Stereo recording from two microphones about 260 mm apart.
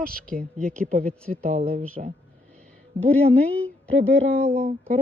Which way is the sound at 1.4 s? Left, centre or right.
Right.